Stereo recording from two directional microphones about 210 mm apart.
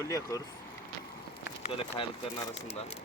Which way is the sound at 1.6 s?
25° left (ahead or behind).